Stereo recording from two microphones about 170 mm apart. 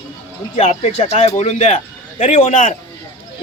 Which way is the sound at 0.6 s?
40° left (ahead or behind).